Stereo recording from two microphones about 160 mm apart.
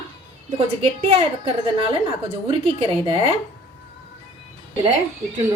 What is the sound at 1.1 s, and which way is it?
Speech, 35° right (ahead or behind).